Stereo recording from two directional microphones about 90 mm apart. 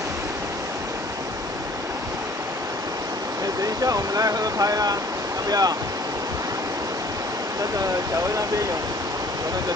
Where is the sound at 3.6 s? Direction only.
40° right (ahead or behind).